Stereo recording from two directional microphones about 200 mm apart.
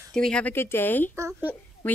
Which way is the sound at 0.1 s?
5° left (ahead or behind).